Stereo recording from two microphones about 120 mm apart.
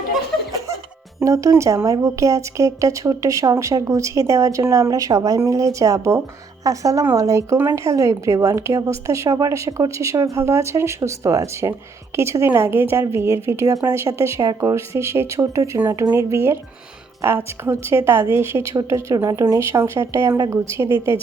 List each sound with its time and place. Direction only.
1.2 s speech: 25° right (ahead or behind)